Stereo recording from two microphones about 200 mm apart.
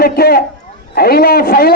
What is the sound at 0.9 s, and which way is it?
Speech, 50° left (ahead or behind).